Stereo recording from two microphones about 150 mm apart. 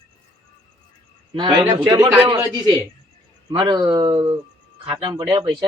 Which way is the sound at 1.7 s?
30° right (ahead or behind).